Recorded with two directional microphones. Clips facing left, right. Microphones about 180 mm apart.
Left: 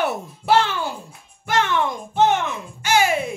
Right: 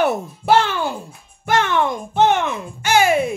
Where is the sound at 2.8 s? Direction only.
55° right (ahead or behind).